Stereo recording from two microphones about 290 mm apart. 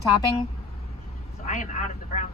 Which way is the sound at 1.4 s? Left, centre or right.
Left.